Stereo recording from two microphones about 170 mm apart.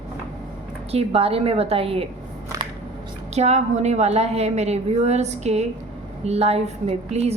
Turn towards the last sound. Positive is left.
turn(degrees=-40)  # may be behind; listen again after turning